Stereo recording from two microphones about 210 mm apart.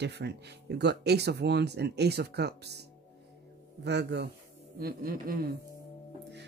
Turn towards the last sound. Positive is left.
turn(degrees=-45)  # may be behind; listen again after turning